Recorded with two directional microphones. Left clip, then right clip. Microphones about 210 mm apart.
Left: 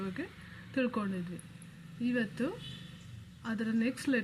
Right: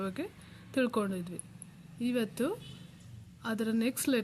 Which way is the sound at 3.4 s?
25° right (ahead or behind).